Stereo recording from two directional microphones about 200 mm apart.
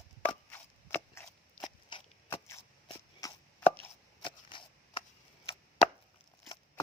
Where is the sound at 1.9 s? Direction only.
25° left (ahead or behind).